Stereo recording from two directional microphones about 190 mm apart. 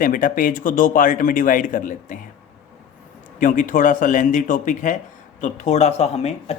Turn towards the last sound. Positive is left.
turn(degrees=35)  # may be behind; listen again after turning